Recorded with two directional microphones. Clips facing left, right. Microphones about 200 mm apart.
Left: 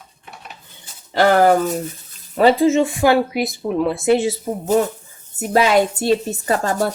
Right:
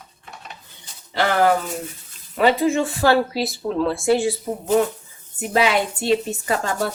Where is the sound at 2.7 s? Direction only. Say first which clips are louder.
Left 3 dB; 20° left (ahead or behind).